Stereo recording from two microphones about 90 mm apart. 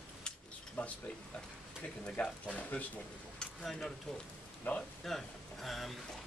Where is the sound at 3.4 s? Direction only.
5° left (ahead or behind).